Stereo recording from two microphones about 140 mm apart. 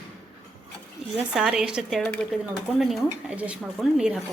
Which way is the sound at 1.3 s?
5° right (ahead or behind).